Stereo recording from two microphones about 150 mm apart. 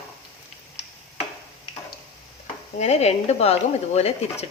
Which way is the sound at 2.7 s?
45° left (ahead or behind).